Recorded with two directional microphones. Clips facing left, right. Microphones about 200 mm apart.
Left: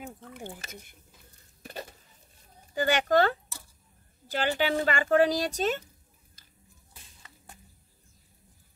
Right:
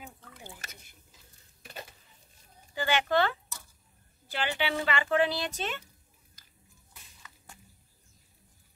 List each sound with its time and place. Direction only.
0.0 s drip: 55° left (ahead or behind)
1.6 s a sound: 40° left (ahead or behind)
2.7 s speech: 45° left (ahead or behind)